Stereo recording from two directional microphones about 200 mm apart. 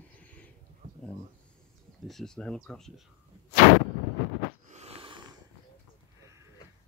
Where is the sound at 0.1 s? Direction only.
5° left (ahead or behind).